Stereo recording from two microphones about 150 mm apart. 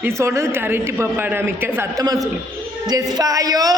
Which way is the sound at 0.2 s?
20° right (ahead or behind).